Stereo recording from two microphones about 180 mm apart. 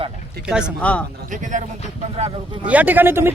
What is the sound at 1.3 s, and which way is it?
Speech, 45° right (ahead or behind).